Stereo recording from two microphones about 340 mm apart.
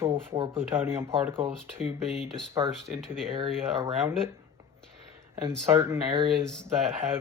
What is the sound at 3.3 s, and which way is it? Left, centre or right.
Speech, centre.